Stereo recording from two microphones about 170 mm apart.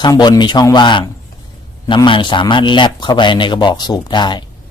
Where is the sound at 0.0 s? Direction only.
25° left (ahead or behind).